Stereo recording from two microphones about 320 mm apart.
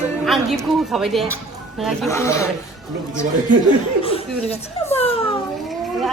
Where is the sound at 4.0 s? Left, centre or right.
Centre.